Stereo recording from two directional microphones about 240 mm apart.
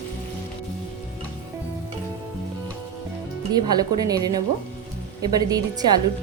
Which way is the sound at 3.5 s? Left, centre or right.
Centre.